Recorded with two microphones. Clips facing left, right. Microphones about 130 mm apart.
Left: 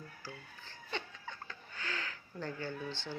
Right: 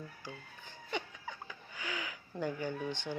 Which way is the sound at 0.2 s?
15° right (ahead or behind).